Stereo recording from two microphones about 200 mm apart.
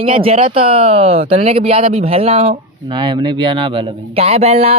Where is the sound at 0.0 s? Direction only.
25° right (ahead or behind).